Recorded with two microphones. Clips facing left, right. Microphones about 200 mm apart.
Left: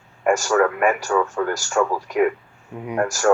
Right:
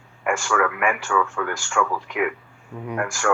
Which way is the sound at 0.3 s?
40° left (ahead or behind).